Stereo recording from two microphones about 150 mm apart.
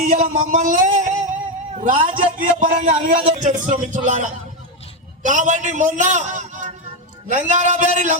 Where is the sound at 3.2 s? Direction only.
50° right (ahead or behind).